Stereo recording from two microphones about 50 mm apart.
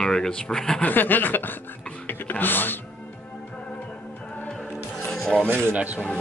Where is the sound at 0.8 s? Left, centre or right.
Left.